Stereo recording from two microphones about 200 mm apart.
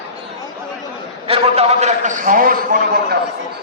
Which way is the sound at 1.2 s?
30° right (ahead or behind).